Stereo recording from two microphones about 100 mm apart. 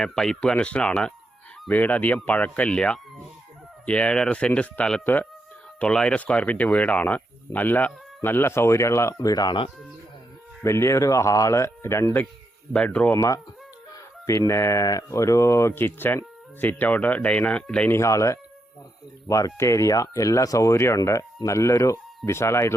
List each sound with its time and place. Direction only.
0.0 s speech: 5° left (ahead or behind); by 9.6 s 40° left (ahead or behind)
10.6 s speech: 25° left (ahead or behind)
12.7 s speech: 10° left (ahead or behind)
13.1 s speech: 35° left (ahead or behind); by 17.9 s 10° left (ahead or behind)
17.9 s speech: 30° left (ahead or behind)